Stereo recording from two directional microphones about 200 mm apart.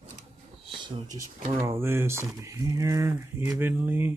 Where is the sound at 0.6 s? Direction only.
25° right (ahead or behind).